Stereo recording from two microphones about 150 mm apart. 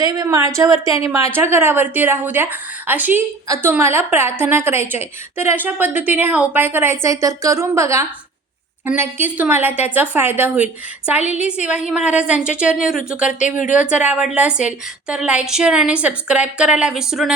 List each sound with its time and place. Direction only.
0.0 s a woman's voice: 25° right (ahead or behind); by 13.3 s 10° right (ahead or behind)
13.4 s speech: 55° left (ahead or behind)
13.7 s a woman's voice: 10° right (ahead or behind)